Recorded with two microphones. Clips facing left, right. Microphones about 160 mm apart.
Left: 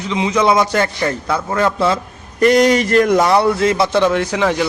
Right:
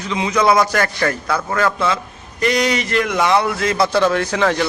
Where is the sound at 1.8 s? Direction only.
35° left (ahead or behind).